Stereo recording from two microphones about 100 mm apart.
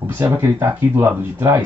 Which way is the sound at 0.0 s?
20° right (ahead or behind).